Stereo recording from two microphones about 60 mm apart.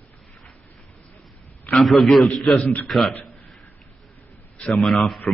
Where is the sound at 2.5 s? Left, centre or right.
Left.